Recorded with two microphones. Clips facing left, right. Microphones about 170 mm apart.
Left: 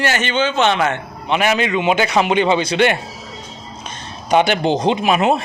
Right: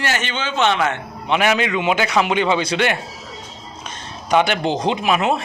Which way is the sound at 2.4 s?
25° left (ahead or behind).